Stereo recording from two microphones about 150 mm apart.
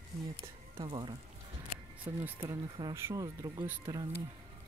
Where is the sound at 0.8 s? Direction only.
30° right (ahead or behind).